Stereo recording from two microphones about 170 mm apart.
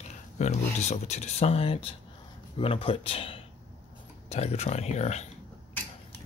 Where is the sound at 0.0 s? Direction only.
40° left (ahead or behind).